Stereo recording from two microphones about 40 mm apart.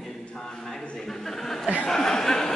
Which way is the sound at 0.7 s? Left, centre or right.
Centre.